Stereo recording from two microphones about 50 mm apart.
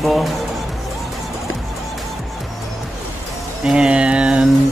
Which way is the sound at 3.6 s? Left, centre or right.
Centre.